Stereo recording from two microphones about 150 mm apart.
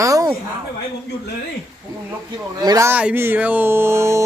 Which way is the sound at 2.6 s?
25° right (ahead or behind).